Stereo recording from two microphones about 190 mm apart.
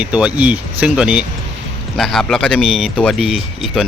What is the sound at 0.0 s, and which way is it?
Speech, 5° right (ahead or behind).